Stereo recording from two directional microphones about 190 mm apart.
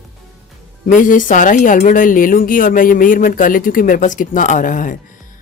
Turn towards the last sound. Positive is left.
turn(degrees=45)  # may be behind; listen again after turning